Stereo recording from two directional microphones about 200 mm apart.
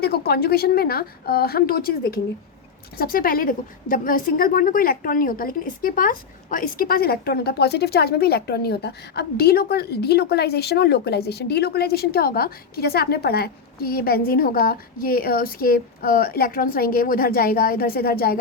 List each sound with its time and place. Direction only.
0.0 s a woman's voice: 50° left (ahead or behind)